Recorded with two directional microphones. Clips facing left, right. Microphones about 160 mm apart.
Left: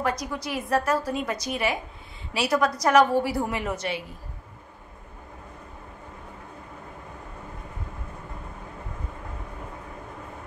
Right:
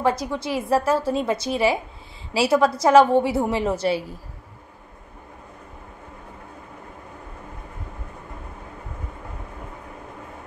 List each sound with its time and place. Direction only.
0.0 s a woman's voice: 30° right (ahead or behind)